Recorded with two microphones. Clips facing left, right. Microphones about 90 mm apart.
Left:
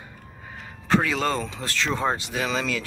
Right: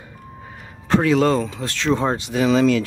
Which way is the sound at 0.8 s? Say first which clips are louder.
Right 6 dB; centre (ahead or behind).